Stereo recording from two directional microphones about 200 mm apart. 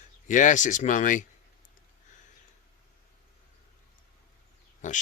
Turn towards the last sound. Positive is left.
turn(degrees=40)  # may be behind; listen again after turning